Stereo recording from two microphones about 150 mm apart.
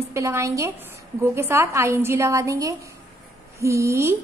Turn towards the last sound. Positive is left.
turn(degrees=-20)  # may be behind; listen again after turning